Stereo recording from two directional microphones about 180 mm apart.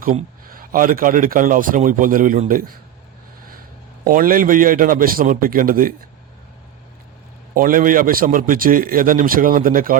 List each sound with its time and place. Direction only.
0.0 s speech: 50° right (ahead or behind)
4.0 s speech: 50° right (ahead or behind)
7.5 s speech: 50° right (ahead or behind)